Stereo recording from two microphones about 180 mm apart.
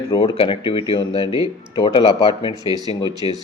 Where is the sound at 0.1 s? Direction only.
30° left (ahead or behind).